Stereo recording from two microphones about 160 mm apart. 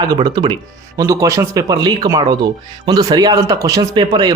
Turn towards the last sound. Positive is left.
turn(degrees=-25)  # may be behind; listen again after turning